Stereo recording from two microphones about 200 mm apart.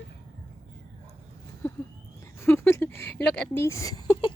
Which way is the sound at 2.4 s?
10° left (ahead or behind).